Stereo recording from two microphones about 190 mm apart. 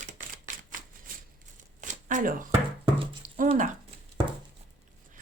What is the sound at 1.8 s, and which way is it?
Shuffling cards, 40° right (ahead or behind).